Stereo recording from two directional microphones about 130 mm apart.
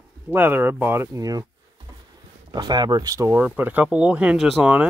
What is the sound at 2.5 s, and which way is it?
Speech, 30° right (ahead or behind).